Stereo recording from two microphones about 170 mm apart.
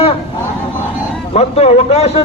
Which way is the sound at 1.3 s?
35° left (ahead or behind).